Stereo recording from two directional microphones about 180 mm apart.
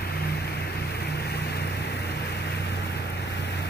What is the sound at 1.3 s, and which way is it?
Vehicle, 65° left (ahead or behind).